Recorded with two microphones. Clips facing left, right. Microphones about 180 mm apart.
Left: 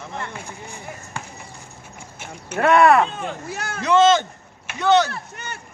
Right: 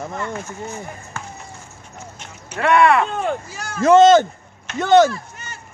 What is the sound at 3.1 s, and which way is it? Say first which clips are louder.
Speech: right 7 dB; 50° right (ahead or behind).